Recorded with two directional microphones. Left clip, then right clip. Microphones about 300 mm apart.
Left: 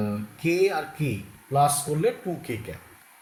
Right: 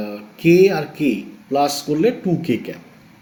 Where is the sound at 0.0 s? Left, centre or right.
Right.